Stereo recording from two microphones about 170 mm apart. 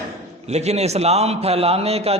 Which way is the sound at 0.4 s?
40° right (ahead or behind).